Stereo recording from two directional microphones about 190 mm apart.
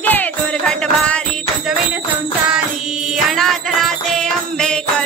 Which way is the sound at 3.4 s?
Centre (ahead or behind).